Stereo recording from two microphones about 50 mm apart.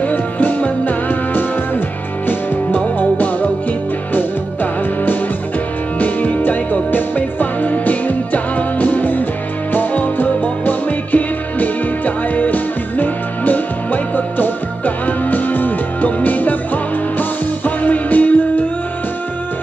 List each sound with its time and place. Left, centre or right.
0.0 s music: left
5.9 s music: left